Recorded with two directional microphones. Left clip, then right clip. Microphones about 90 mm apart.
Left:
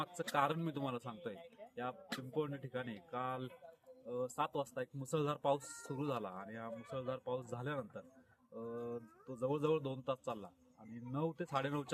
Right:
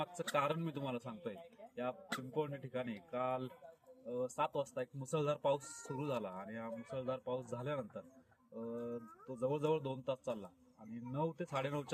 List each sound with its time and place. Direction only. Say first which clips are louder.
0.3 s a man's voice: left 1 dB; 30° left (ahead or behind)